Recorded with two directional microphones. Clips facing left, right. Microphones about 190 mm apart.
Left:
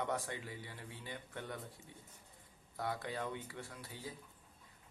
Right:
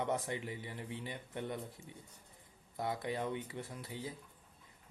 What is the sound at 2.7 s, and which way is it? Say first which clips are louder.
Speech: right 3 dB; 20° right (ahead or behind).